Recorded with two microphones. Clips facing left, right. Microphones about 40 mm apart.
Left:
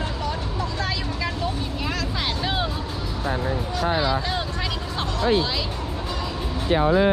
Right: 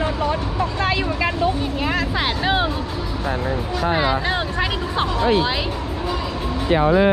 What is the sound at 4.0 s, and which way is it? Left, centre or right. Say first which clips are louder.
Speech: right 4 dB; right.